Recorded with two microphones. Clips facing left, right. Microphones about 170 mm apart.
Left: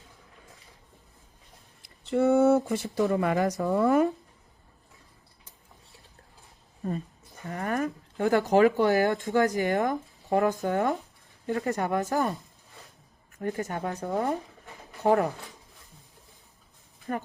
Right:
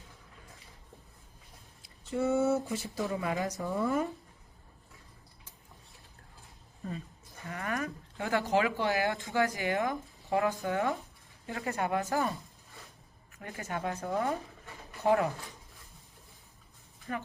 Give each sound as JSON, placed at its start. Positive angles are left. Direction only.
{"t": 2.0, "sound": "speech", "side_deg": 60}
{"t": 7.4, "sound": "speech", "side_deg": 40}
{"t": 13.4, "sound": "speech", "side_deg": 40}
{"t": 17.1, "sound": "speech", "side_deg": 40}